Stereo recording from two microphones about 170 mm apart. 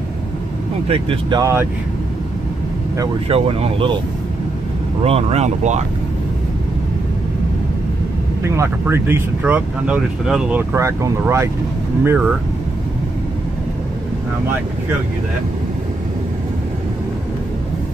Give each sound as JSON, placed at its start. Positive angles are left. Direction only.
{"t": 0.8, "sound": "speech", "side_deg": -30}
{"t": 1.4, "sound": "speech", "side_deg": -15}
{"t": 3.3, "sound": "speech", "side_deg": -35}
{"t": 5.0, "sound": "speech", "side_deg": -35}
{"t": 8.4, "sound": "speech", "side_deg": -15}